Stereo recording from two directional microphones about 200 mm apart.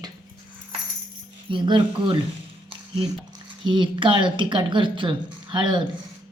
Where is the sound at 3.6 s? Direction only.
25° right (ahead or behind).